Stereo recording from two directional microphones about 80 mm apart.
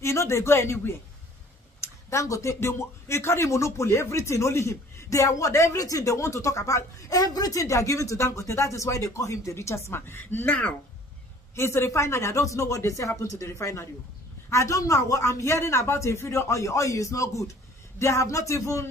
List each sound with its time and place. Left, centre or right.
0.0 s speech: left